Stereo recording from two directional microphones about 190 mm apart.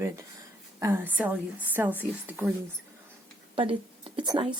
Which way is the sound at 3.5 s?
25° right (ahead or behind).